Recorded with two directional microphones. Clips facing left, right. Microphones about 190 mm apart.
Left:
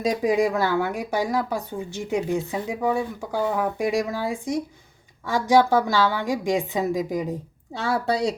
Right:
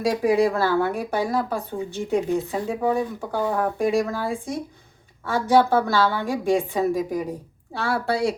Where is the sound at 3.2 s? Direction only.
10° left (ahead or behind).